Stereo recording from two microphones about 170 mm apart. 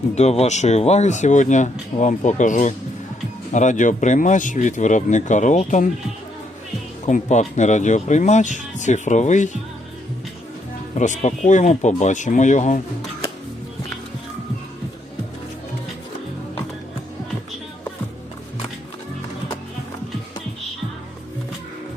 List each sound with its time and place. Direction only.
0.2 s speech: 40° left (ahead or behind)
7.0 s speech: 45° left (ahead or behind)
10.9 s speech: 45° left (ahead or behind)